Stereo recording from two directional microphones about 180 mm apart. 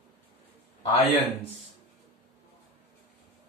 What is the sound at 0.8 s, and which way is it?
Speech, 35° left (ahead or behind).